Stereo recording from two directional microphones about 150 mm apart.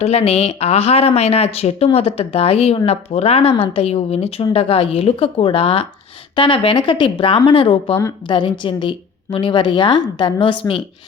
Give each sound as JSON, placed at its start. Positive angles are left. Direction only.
{"t": 0.0, "sound": "a woman's voice", "side_deg": 40}